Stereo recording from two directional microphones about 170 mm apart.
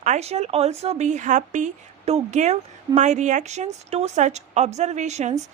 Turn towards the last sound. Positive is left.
turn(degrees=-45)  # may be behind; listen again after turning